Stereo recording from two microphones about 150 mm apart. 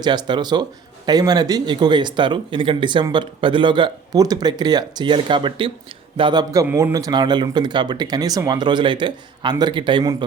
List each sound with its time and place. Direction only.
0.0 s speech: 30° right (ahead or behind)
6.7 s speech: 20° right (ahead or behind)